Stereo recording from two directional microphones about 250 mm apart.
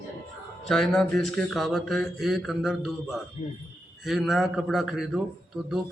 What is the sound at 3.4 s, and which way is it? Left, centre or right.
Speech, left.